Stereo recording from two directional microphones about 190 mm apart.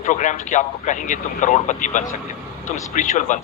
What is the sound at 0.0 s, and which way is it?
Speech, 40° left (ahead or behind).